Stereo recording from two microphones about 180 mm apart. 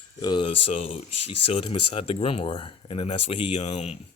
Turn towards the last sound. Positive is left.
turn(degrees=35)  # may be behind; listen again after turning